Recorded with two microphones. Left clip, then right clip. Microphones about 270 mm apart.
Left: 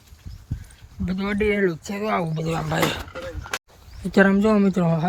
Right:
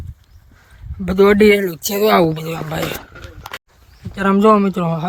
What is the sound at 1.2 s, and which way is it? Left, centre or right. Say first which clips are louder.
Speech: right 18 dB; centre.